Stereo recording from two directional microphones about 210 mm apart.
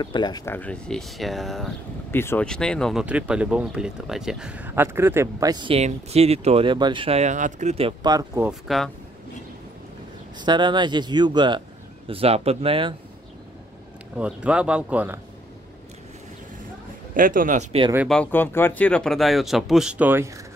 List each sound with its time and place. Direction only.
0.0 s speech: 20° left (ahead or behind); by 1.7 s centre (ahead or behind)
2.0 s speech: 10° left (ahead or behind); by 8.5 s 20° right (ahead or behind)
8.5 s speech: centre (ahead or behind)
10.4 s speech: 20° right (ahead or behind)
14.1 s speech: 5° right (ahead or behind)
17.1 s speech: 40° right (ahead or behind)
17.9 s speech: centre (ahead or behind)